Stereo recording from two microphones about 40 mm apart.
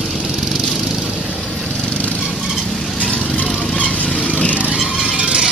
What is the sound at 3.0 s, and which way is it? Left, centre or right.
Lawn mower, left.